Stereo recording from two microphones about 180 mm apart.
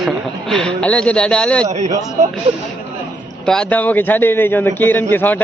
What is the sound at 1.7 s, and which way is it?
Speech, 40° right (ahead or behind).